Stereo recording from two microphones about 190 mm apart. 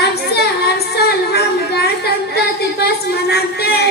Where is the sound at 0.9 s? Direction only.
60° left (ahead or behind).